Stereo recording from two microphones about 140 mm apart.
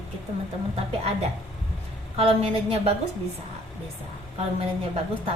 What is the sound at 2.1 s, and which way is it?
Speech, 45° right (ahead or behind).